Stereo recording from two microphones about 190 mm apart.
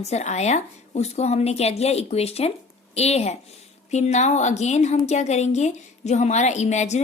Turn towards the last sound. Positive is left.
turn(degrees=35)  # may be behind; listen again after turning